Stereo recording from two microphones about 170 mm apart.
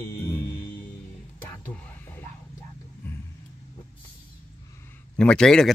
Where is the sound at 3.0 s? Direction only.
15° left (ahead or behind).